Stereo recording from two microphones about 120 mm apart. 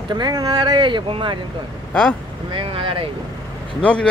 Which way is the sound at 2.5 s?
45° right (ahead or behind).